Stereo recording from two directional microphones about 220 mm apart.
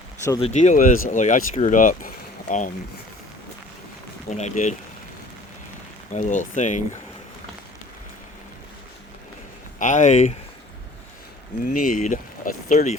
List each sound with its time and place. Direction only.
0.3 s speech: 25° left (ahead or behind)
4.3 s speech: 30° left (ahead or behind)
6.1 s speech: 35° left (ahead or behind)
9.7 s speech: 35° left (ahead or behind)
11.6 s speech: 35° left (ahead or behind)